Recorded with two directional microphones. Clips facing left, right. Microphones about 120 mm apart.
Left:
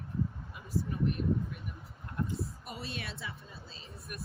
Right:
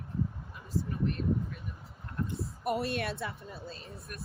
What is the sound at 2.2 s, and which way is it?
A woman's voice, 60° right (ahead or behind).